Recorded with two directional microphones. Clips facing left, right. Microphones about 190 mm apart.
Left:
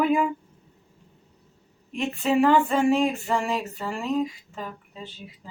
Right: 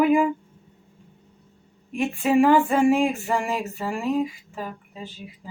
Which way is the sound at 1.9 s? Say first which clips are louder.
Right 3 dB; 10° right (ahead or behind).